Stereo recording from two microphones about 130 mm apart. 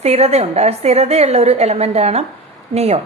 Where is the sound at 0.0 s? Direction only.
55° right (ahead or behind).